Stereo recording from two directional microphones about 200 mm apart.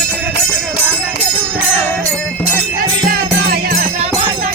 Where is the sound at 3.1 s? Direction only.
45° right (ahead or behind).